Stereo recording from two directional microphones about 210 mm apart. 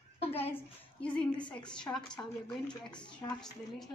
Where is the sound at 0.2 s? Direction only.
30° left (ahead or behind).